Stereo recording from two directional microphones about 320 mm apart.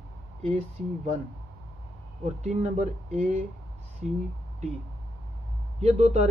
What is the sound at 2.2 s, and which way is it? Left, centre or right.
Speech, right.